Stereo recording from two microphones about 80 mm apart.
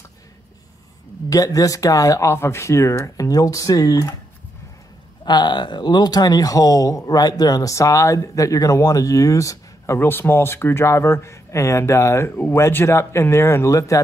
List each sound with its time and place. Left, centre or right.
1.3 s speech: left
5.2 s speech: left
9.9 s speech: left